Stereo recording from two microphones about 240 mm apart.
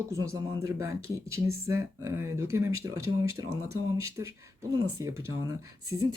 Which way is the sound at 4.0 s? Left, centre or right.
Centre.